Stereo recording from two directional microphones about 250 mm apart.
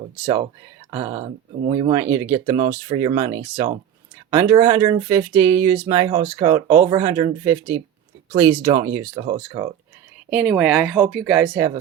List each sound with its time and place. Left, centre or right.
0.9 s speech: centre
10.2 s speech: centre